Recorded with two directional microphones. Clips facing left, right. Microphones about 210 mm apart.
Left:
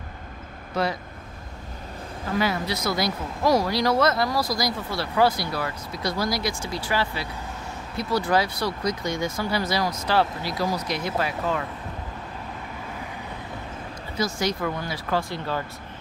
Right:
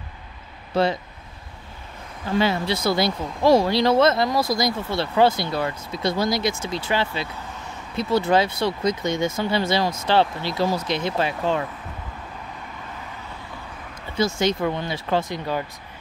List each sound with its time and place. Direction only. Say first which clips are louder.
0.7 s speech: right 5 dB; 30° right (ahead or behind)
2.3 s speech: right 4 dB; 25° right (ahead or behind)
14.1 s speech: right 4 dB; 25° right (ahead or behind)